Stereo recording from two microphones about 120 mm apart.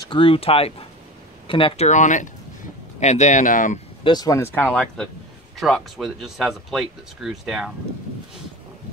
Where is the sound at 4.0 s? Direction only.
35° left (ahead or behind).